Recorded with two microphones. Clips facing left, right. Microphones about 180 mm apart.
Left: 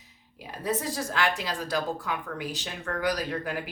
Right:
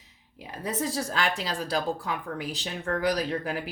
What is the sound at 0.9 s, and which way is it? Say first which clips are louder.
Speech: even; 35° right (ahead or behind).